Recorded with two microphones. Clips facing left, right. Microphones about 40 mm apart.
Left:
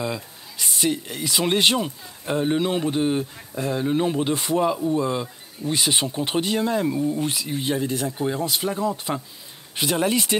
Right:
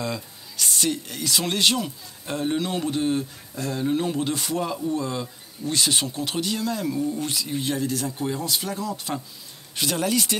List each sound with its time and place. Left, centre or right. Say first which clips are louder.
0.0 s speech: left 2 dB; centre